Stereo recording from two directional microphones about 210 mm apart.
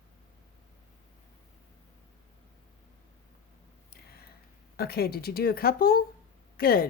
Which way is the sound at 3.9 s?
50° left (ahead or behind).